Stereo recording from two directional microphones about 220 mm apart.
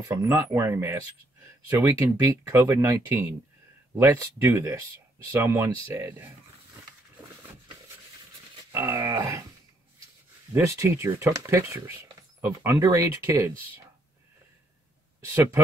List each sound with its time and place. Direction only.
0.1 s speech: 10° right (ahead or behind)
8.7 s speech: 10° right (ahead or behind)
10.5 s speech: 10° right (ahead or behind)